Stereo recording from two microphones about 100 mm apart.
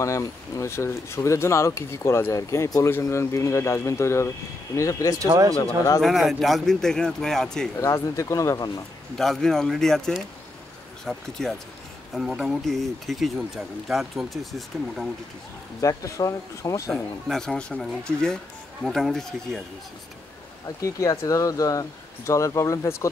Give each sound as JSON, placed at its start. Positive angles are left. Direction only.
{"t": 0.0, "sound": "speech", "side_deg": 30}
{"t": 5.2, "sound": "speech", "side_deg": -35}
{"t": 5.9, "sound": "speech", "side_deg": 0}
{"t": 7.7, "sound": "speech", "side_deg": 30}
{"t": 9.2, "sound": "speech", "side_deg": 5}
{"t": 15.8, "sound": "speech", "side_deg": 35}
{"t": 16.9, "sound": "speech", "side_deg": 5}
{"t": 20.6, "sound": "speech", "side_deg": 35}